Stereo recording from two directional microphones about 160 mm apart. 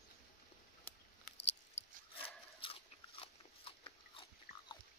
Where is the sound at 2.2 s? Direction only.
35° left (ahead or behind).